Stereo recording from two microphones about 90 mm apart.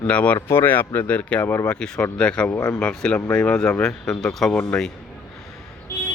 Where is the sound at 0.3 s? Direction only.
30° left (ahead or behind); by 4.9 s 15° left (ahead or behind).